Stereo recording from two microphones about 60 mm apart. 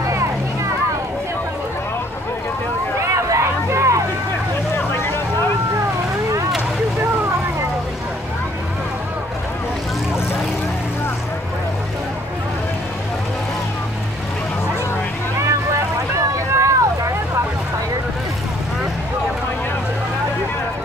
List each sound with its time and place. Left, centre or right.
3.1 s vehicle: right
4.7 s vehicle: left
15.4 s boat: right